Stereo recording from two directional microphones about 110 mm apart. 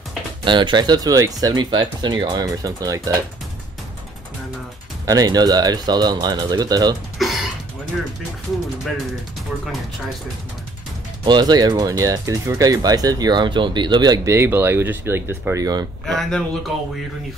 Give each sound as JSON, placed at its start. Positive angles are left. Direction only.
{"t": 0.5, "sound": "speech", "side_deg": -45}
{"t": 5.0, "sound": "speech", "side_deg": -35}
{"t": 7.2, "sound": "a sound", "side_deg": 0}
{"t": 11.2, "sound": "speech", "side_deg": -40}
{"t": 14.3, "sound": "speech", "side_deg": -20}
{"t": 16.1, "sound": "speech", "side_deg": 5}